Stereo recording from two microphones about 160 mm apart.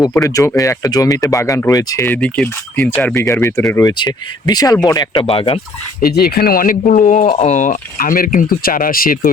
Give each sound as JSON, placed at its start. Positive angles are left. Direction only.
{"t": 0.1, "sound": "speech", "side_deg": 20}
{"t": 2.1, "sound": "speech", "side_deg": 5}
{"t": 3.2, "sound": "speech", "side_deg": 20}
{"t": 5.2, "sound": "speech", "side_deg": 35}
{"t": 6.0, "sound": "speech", "side_deg": 80}